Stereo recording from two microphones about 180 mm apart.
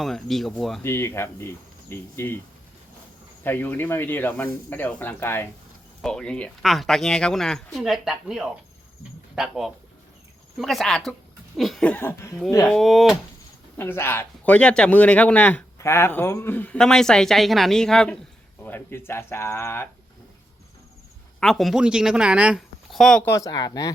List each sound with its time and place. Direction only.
0.0 s speech: centre (ahead or behind)
0.8 s a man's voice: 15° left (ahead or behind)
3.4 s a man's voice: 10° left (ahead or behind)
12.7 s speech: centre (ahead or behind)
13.7 s a man's voice: 10° left (ahead or behind)
21.4 s speech: centre (ahead or behind)
23.3 s speech: 20° left (ahead or behind)